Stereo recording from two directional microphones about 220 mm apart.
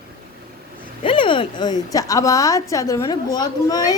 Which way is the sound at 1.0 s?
25° left (ahead or behind).